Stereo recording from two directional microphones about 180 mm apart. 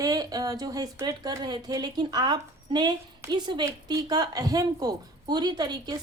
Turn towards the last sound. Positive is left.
turn(degrees=-25)  # may be behind; listen again after turning